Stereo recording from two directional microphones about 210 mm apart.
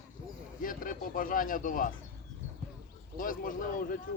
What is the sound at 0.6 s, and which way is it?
Speech, 40° left (ahead or behind).